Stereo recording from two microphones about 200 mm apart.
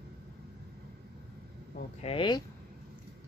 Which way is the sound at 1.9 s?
30° left (ahead or behind).